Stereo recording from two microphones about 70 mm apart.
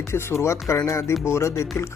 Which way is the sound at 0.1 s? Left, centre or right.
Left.